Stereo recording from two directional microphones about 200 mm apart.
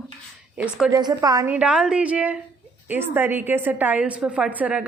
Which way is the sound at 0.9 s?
15° right (ahead or behind).